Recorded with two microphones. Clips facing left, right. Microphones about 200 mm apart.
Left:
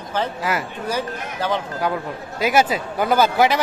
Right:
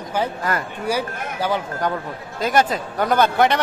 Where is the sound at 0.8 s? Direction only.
10° right (ahead or behind).